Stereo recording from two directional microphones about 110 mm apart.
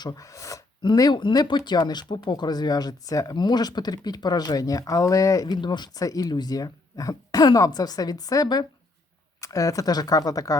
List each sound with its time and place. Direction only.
0.0 s speech: 35° left (ahead or behind)
5.5 s speech: 40° left (ahead or behind)